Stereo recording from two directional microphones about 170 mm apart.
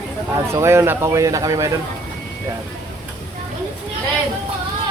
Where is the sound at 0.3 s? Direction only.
15° right (ahead or behind).